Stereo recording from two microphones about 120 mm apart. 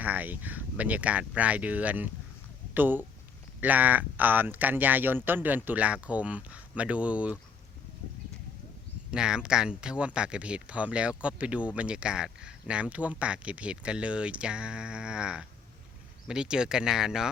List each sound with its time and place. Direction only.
0.0 s speech: 15° right (ahead or behind)
9.1 s speech: 5° right (ahead or behind)